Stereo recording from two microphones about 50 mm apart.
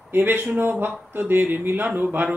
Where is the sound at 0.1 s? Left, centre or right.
Right.